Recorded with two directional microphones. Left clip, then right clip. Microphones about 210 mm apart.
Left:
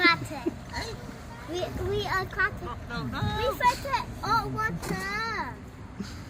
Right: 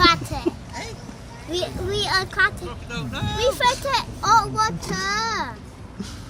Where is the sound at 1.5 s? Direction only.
40° right (ahead or behind).